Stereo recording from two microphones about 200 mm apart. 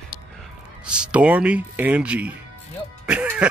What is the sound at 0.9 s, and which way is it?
Speech, 5° right (ahead or behind).